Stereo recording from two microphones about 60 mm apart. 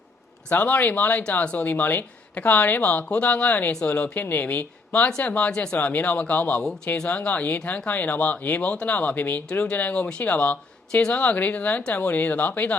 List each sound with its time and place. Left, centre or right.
0.5 s speech: left
3.0 s speech: left
3.7 s speech: centre
3.9 s speech: left
5.5 s speech: centre
5.7 s speech: left